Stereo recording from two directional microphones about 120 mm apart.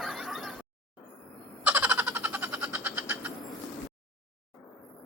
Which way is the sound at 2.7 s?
20° right (ahead or behind).